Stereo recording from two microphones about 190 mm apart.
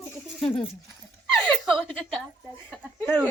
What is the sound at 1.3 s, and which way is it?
Speech, 5° left (ahead or behind).